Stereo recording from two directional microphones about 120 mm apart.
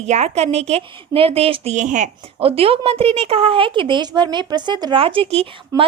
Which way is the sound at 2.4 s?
55° right (ahead or behind).